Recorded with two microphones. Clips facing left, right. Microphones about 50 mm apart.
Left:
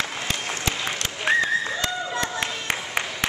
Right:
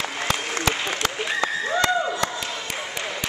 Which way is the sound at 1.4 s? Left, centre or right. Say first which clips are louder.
Right 2 dB; right.